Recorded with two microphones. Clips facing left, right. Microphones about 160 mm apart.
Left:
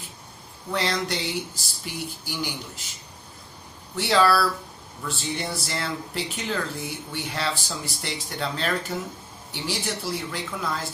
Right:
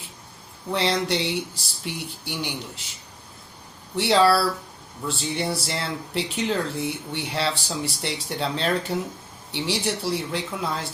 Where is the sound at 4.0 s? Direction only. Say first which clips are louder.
Right 2 dB; 30° right (ahead or behind).